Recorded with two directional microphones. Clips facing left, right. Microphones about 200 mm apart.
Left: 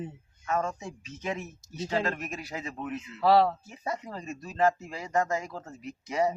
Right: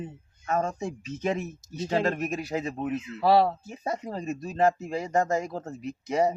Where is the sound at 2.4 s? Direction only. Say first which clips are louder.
Right 7 dB; 25° right (ahead or behind).